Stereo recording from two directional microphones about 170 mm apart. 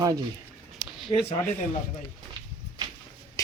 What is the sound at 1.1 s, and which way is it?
Speech, 35° left (ahead or behind).